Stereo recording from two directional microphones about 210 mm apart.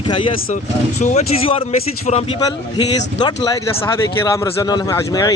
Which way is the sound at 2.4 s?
15° left (ahead or behind).